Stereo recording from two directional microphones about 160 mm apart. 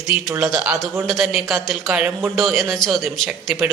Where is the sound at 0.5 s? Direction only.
5° right (ahead or behind).